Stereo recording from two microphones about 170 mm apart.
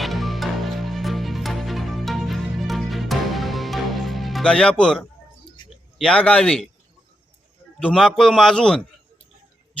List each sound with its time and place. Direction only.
0.0 s music: centre (ahead or behind)
5.6 s a sound: 25° left (ahead or behind)
6.0 s a man's voice: 5° left (ahead or behind)
7.8 s a man's voice: 5° left (ahead or behind)